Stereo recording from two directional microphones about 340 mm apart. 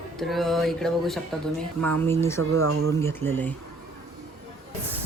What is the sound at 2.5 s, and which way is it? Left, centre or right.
Speech, right.